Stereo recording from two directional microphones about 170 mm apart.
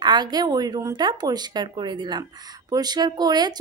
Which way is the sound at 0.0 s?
25° right (ahead or behind).